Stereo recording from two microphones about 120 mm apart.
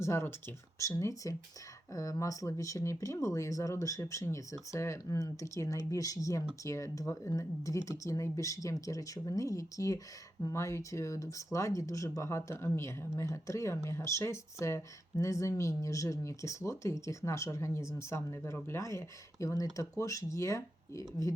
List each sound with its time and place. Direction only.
0.0 s speech: 20° left (ahead or behind)